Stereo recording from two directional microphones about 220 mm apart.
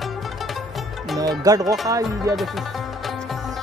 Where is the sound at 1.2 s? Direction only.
15° right (ahead or behind).